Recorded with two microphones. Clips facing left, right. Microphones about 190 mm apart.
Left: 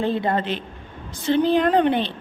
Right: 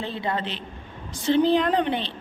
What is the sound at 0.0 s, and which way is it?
A woman's voice, 50° left (ahead or behind).